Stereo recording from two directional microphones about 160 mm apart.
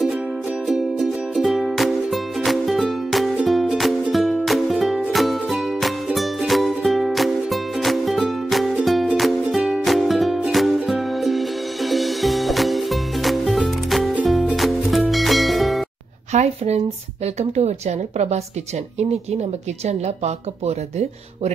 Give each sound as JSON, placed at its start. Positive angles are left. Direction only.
{"t": 0.7, "sound": "music", "side_deg": 0}
{"t": 16.3, "sound": "a sound", "side_deg": -45}
{"t": 17.4, "sound": "a woman's voice", "side_deg": -45}
{"t": 19.9, "sound": "a woman's voice", "side_deg": -45}